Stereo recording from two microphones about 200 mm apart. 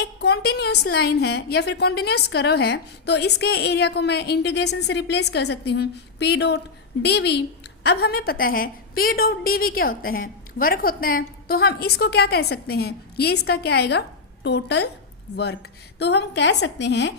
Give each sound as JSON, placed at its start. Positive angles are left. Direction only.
{"t": 0.0, "sound": "a woman's voice", "side_deg": 55}
{"t": 16.0, "sound": "a woman's voice", "side_deg": 60}